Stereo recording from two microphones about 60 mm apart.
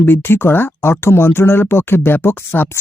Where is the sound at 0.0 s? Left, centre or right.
Left.